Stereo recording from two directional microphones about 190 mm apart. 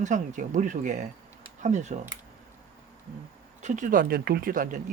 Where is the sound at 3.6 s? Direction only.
40° right (ahead or behind).